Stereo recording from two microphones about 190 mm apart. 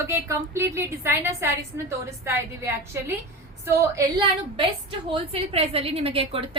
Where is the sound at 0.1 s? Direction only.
15° right (ahead or behind).